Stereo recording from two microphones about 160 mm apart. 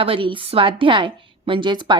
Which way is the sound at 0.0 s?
35° right (ahead or behind).